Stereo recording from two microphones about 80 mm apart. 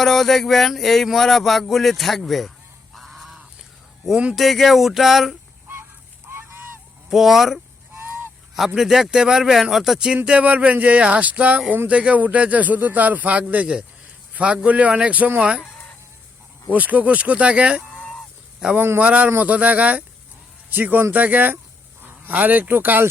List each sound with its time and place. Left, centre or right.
0.0 s speech: centre
2.9 s goose: centre
4.0 s speech: centre
4.4 s speech: centre
7.1 s speech: centre
10.2 s speech: centre
16.6 s speech: centre
17.9 s fowl: centre
18.8 s speech: right
19.0 s speech: centre